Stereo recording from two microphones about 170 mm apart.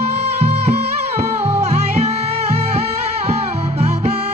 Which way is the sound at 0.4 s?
40° right (ahead or behind).